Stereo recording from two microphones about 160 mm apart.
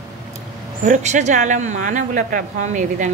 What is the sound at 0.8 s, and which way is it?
Speech, 50° right (ahead or behind).